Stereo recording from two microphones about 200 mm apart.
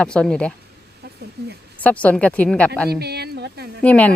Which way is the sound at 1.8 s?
5° left (ahead or behind).